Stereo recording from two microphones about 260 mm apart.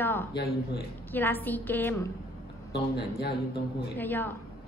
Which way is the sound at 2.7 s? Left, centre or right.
Left.